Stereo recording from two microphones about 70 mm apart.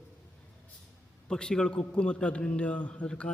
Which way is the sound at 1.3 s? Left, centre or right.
Centre.